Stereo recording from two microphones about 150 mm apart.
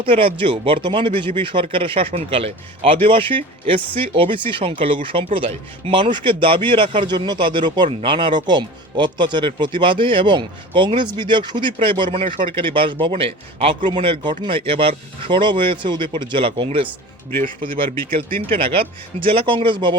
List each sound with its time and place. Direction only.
0.0 s speech: 35° right (ahead or behind)
18.5 s speech: 35° right (ahead or behind)